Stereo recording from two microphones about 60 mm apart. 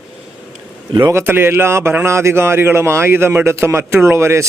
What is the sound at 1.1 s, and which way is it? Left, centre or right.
A man's voice, right.